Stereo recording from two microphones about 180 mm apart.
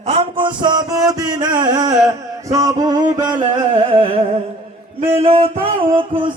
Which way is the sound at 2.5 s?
20° right (ahead or behind).